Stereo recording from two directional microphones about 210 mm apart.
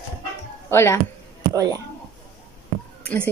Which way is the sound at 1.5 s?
15° right (ahead or behind).